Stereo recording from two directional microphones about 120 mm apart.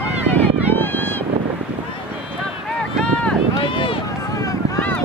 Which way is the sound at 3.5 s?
45° left (ahead or behind).